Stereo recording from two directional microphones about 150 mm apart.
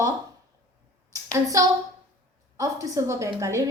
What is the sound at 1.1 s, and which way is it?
A woman's voice, 20° right (ahead or behind).